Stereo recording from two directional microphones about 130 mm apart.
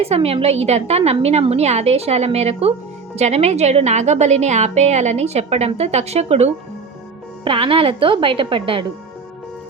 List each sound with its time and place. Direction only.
0.0 s a woman's voice: 50° right (ahead or behind)
7.4 s a woman's voice: 45° right (ahead or behind)